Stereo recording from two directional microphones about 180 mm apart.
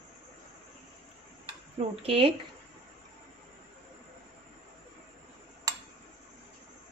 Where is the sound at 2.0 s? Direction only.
30° right (ahead or behind).